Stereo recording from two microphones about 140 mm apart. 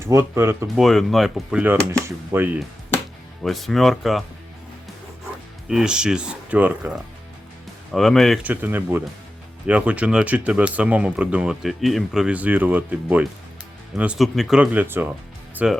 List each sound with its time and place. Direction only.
0.0 s speech: 20° right (ahead or behind)
0.8 s speech: centre (ahead or behind); by 2.6 s 15° right (ahead or behind)
3.4 s speech: centre (ahead or behind)
5.6 s speech: 5° right (ahead or behind)
7.9 s speech: centre (ahead or behind)
8.4 s speech: 15° right (ahead or behind)